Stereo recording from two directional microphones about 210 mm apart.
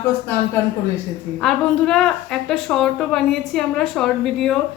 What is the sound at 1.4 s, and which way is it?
A woman's voice, centre (ahead or behind).